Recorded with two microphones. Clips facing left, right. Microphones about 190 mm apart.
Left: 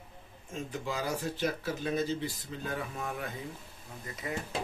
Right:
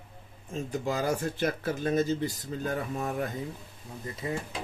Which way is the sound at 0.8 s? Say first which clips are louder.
Right 5 dB; 45° right (ahead or behind).